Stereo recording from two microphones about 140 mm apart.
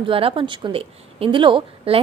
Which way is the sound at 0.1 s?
40° right (ahead or behind).